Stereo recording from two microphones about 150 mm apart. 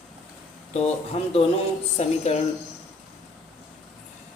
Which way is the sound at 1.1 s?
45° left (ahead or behind).